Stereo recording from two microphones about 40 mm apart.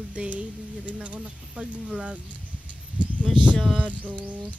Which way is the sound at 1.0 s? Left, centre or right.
Right.